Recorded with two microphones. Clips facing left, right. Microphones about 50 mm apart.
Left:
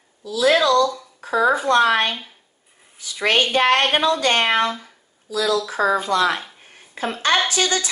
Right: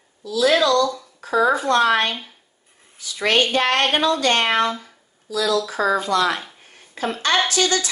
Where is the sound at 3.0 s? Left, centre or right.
Left.